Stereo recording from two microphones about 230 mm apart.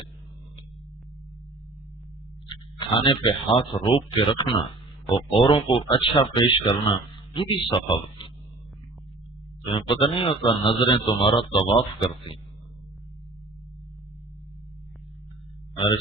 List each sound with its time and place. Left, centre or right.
2.5 s a man's voice: left
9.7 s a man's voice: left